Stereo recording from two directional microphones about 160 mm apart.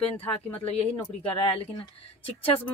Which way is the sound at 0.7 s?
35° left (ahead or behind).